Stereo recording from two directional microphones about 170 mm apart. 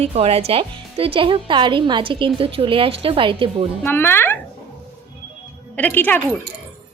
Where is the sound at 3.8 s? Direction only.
10° left (ahead or behind).